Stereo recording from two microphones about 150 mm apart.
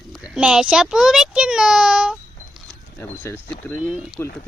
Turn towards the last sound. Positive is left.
turn(degrees=15)  # may be behind; listen again after turning